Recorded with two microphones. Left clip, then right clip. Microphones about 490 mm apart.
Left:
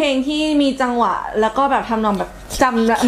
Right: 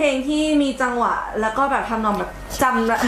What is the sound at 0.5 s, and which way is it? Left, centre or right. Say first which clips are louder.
A woman's voice: left 3 dB; left.